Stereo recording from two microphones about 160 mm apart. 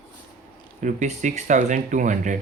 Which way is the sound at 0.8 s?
50° right (ahead or behind).